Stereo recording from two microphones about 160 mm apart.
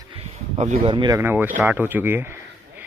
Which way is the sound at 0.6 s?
40° right (ahead or behind).